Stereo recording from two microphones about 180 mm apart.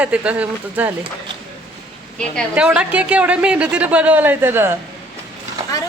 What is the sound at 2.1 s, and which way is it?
A woman's voice, centre (ahead or behind).